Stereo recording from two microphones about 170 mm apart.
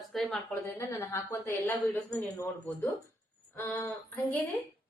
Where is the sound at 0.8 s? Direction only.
20° left (ahead or behind).